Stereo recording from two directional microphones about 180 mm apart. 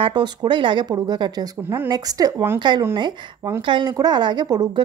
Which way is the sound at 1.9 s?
20° right (ahead or behind).